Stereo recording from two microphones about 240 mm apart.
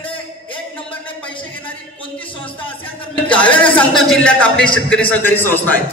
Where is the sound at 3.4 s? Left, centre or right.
Centre.